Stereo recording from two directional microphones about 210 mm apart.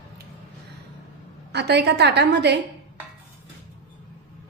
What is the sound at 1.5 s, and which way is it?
A woman's voice, 55° right (ahead or behind).